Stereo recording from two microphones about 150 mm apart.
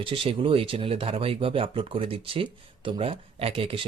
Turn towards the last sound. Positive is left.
turn(degrees=-35)  # may be behind; listen again after turning